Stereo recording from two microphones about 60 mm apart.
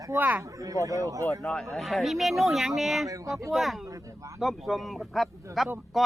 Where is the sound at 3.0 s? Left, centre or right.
Right.